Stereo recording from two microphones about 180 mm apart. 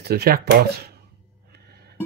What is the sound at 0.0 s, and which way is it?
Speech, 60° right (ahead or behind).